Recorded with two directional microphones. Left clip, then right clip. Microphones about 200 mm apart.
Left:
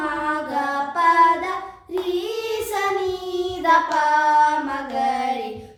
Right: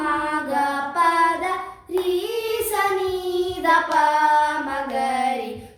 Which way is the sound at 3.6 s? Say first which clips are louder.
Left 2 dB; 5° left (ahead or behind).